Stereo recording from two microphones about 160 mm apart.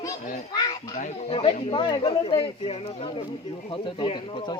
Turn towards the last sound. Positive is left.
turn(degrees=30)  # may be behind; listen again after turning